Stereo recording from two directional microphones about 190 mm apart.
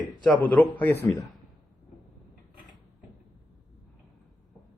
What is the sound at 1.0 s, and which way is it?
Speech, 15° left (ahead or behind).